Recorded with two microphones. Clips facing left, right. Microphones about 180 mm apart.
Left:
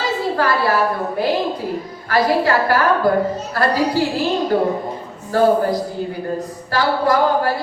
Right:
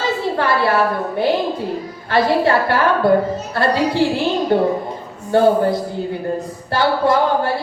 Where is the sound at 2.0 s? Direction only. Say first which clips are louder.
Right 1 dB; 25° right (ahead or behind).